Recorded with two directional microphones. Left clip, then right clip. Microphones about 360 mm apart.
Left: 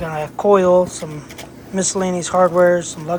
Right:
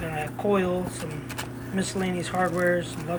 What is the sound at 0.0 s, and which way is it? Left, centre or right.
Speech, centre.